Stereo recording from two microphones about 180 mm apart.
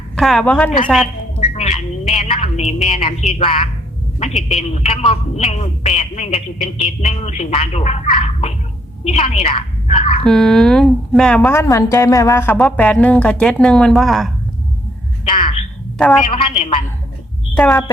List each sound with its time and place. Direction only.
0.2 s a woman's voice: centre (ahead or behind)
1.4 s a woman's voice: 35° left (ahead or behind)
10.2 s a woman's voice: 5° left (ahead or behind)
15.2 s a sound: 30° left (ahead or behind)
16.1 s a woman's voice: 30° left (ahead or behind)
17.5 s a woman's voice: 5° left (ahead or behind)